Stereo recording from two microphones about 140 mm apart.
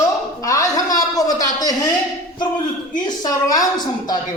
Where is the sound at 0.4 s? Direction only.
25° left (ahead or behind).